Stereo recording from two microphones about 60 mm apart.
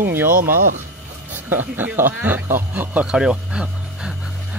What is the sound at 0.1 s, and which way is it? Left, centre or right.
Speech, right.